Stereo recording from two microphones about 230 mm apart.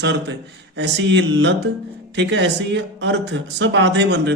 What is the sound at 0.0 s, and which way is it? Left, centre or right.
A man's voice, right.